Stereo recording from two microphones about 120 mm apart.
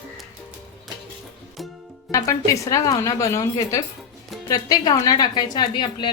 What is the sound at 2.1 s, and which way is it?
A woman's voice, 25° left (ahead or behind).